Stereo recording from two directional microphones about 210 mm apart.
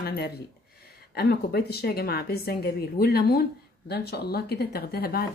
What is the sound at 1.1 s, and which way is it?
A woman's voice, 50° left (ahead or behind).